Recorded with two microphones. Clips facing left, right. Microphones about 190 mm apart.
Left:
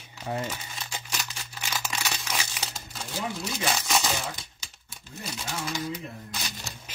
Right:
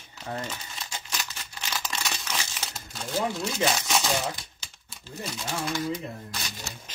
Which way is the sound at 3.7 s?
Centre (ahead or behind).